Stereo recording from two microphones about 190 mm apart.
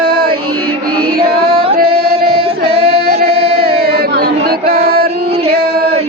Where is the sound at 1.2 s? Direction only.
55° right (ahead or behind).